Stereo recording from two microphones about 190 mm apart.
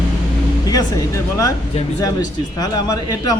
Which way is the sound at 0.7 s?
20° left (ahead or behind).